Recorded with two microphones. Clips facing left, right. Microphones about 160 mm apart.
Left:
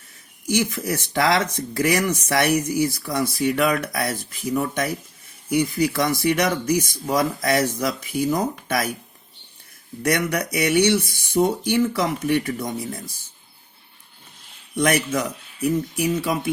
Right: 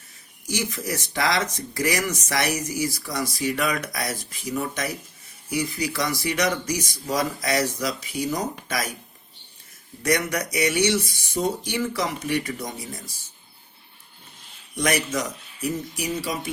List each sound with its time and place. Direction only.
0.5 s speech: 55° left (ahead or behind)
10.0 s speech: 60° left (ahead or behind)
14.8 s speech: 55° left (ahead or behind)